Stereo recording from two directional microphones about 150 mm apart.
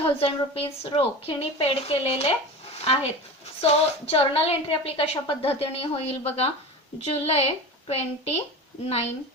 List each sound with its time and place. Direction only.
0.2 s a woman's voice: 40° left (ahead or behind)